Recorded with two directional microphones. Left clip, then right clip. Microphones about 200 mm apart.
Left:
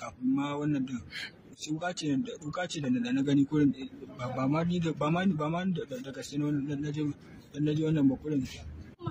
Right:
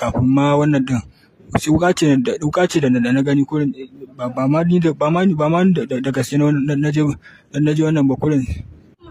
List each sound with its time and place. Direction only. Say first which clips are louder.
0.3 s speech: right 15 dB; 60° right (ahead or behind)